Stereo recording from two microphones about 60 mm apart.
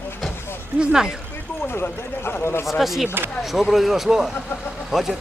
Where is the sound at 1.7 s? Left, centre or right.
Left.